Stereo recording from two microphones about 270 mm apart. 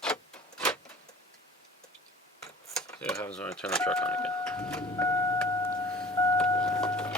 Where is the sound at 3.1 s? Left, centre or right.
Centre.